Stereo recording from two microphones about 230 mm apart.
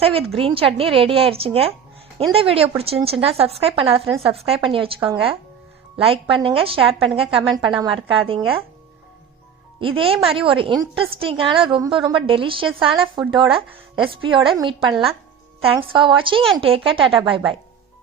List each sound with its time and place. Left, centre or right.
0.0 s a woman's voice: right
6.0 s a woman's voice: right
9.8 s a woman's voice: right